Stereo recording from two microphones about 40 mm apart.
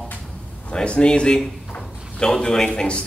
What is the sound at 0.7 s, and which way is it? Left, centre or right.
A man's voice, left.